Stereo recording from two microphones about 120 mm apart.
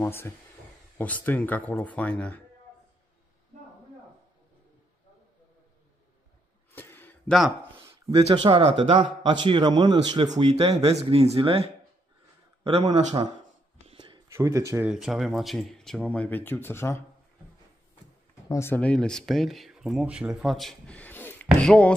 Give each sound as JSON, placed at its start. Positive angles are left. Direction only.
{"t": 0.9, "sound": "speech", "side_deg": 15}
{"t": 6.7, "sound": "a sound", "side_deg": 15}
{"t": 7.2, "sound": "speech", "side_deg": 0}
{"t": 7.9, "sound": "a man's voice", "side_deg": -55}
{"t": 10.3, "sound": "speech", "side_deg": -65}
{"t": 13.8, "sound": "a sound", "side_deg": -45}
{"t": 14.3, "sound": "speech", "side_deg": -25}
{"t": 14.9, "sound": "speech", "side_deg": -5}
{"t": 18.5, "sound": "speech", "side_deg": 20}
{"t": 18.8, "sound": "speech", "side_deg": 10}